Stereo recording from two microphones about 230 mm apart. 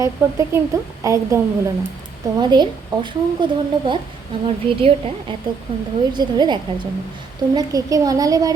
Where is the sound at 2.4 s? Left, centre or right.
Centre.